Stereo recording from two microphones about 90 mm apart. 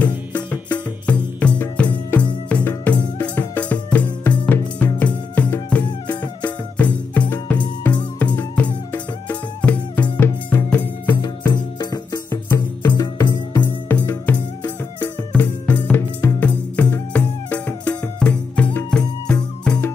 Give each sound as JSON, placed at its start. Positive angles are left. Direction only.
{"t": 0.0, "sound": "music", "side_deg": 15}
{"t": 11.5, "sound": "music", "side_deg": 55}
{"t": 13.6, "sound": "music", "side_deg": 20}